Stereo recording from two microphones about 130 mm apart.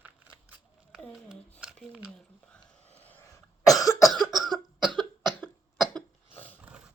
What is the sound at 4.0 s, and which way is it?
Cough, centre (ahead or behind).